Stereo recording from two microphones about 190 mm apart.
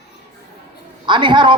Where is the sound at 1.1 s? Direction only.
25° right (ahead or behind).